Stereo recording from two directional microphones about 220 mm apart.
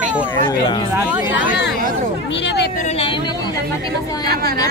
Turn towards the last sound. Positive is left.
turn(degrees=-45)  # may be behind; listen again after turning